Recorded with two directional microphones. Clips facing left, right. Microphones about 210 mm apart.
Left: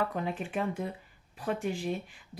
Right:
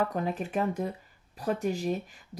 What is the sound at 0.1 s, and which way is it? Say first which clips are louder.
Speech: right 3 dB; 40° right (ahead or behind).